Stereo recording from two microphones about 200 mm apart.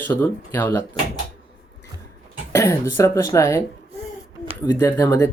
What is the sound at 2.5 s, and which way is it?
Speech, 15° left (ahead or behind).